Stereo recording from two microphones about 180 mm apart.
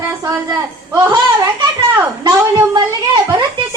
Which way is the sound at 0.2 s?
20° right (ahead or behind).